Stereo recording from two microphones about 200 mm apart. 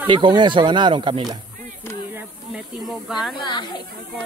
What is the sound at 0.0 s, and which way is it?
Speech, 25° right (ahead or behind).